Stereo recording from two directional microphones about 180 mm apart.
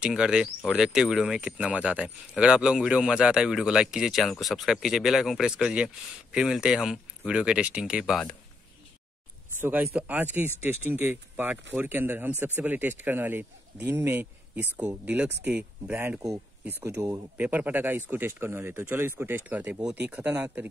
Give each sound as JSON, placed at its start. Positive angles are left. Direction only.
{"t": 0.0, "sound": "speech", "side_deg": -5}
{"t": 9.6, "sound": "speech", "side_deg": -10}